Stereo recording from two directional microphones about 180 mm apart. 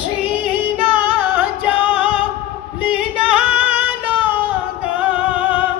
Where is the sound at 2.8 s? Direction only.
5° right (ahead or behind).